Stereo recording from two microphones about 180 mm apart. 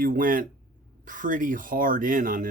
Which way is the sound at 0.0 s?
50° right (ahead or behind).